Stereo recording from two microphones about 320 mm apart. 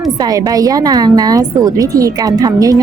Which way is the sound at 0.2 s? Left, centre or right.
Centre.